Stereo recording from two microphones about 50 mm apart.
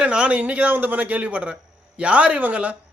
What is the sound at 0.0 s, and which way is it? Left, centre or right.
A man's voice, right.